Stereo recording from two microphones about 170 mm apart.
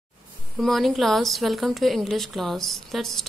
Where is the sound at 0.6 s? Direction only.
Centre (ahead or behind).